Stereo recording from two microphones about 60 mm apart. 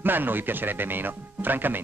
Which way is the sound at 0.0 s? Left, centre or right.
Right.